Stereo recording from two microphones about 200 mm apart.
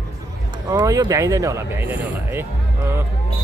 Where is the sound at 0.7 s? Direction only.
15° right (ahead or behind).